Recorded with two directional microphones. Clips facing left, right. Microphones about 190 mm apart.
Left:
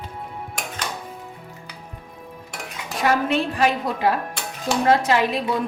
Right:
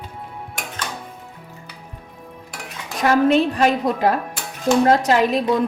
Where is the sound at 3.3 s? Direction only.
40° right (ahead or behind).